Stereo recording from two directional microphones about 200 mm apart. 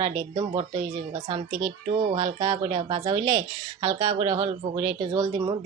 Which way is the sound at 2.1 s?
20° right (ahead or behind).